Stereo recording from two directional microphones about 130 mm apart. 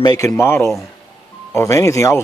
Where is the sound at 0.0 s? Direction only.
25° left (ahead or behind).